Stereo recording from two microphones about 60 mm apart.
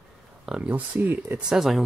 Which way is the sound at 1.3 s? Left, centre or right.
Centre.